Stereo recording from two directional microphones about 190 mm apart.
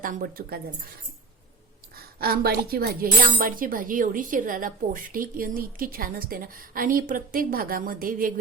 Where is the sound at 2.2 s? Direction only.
55° right (ahead or behind).